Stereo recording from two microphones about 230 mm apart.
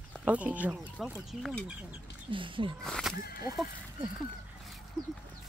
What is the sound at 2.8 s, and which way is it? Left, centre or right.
Speech, centre.